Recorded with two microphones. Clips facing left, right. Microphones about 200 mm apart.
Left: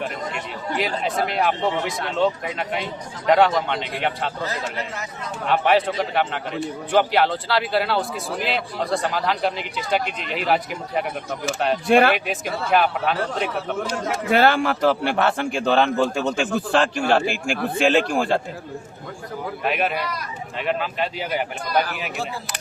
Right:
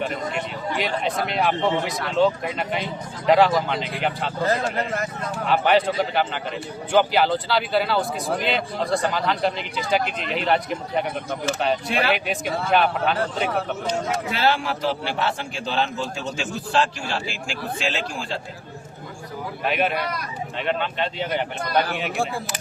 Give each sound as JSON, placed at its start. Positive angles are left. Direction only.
{"t": 0.0, "sound": "speech", "side_deg": 0}
{"t": 4.4, "sound": "speech", "side_deg": -50}
{"t": 5.5, "sound": "speech", "side_deg": 0}
{"t": 11.9, "sound": "speech", "side_deg": 50}
{"t": 12.1, "sound": "speech", "side_deg": 0}
{"t": 13.9, "sound": "a man's voice", "side_deg": 55}
{"t": 19.6, "sound": "speech", "side_deg": 0}